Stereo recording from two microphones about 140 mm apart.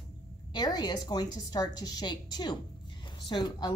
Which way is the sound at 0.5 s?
30° left (ahead or behind).